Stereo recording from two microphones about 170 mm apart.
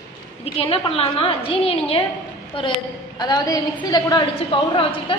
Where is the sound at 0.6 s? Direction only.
35° left (ahead or behind).